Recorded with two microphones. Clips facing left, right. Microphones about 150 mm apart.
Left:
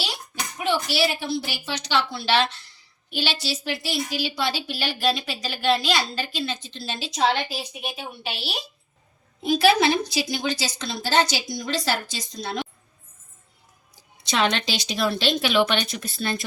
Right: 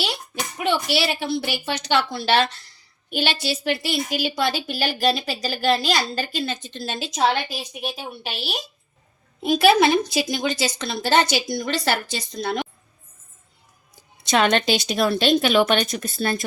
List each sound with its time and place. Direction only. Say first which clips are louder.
0.6 s a woman's voice: right 1 dB; 60° right (ahead or behind)
9.4 s a woman's voice: right 3 dB; 55° right (ahead or behind)
14.3 s a woman's voice: right 5 dB; 50° right (ahead or behind)